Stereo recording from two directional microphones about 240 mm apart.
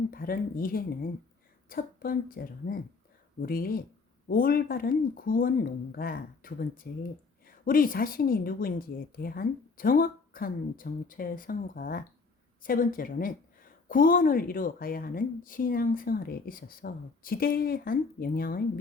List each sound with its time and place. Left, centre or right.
0.1 s a woman's voice: left